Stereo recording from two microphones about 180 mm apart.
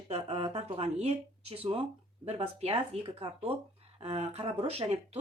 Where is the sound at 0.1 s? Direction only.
35° right (ahead or behind).